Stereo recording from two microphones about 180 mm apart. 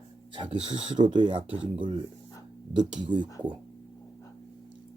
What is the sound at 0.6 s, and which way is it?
Speech, 35° right (ahead or behind).